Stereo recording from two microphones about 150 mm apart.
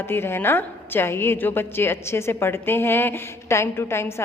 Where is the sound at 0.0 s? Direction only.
15° left (ahead or behind).